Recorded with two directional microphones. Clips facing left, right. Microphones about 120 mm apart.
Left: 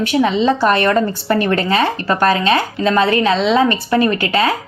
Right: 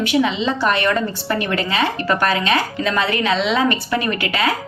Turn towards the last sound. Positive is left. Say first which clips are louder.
# left 6 dB
turn(degrees=35)  # may be behind; listen again after turning